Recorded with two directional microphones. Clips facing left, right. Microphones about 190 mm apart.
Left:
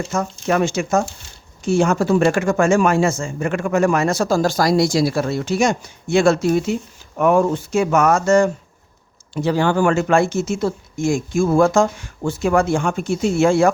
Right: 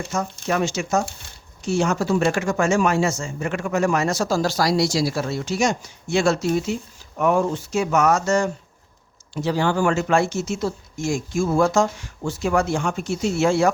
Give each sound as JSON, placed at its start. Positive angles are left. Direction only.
{"t": 0.1, "sound": "speech", "side_deg": 55}